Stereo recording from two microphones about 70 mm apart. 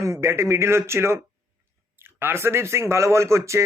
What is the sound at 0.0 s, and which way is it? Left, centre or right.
A man's voice, right.